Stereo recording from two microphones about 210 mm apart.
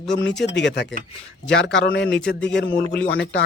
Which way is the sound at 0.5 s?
55° left (ahead or behind).